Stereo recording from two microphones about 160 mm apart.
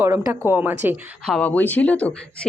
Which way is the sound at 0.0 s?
15° right (ahead or behind).